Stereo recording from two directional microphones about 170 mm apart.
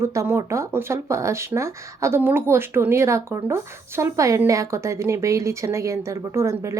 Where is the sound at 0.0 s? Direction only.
15° right (ahead or behind).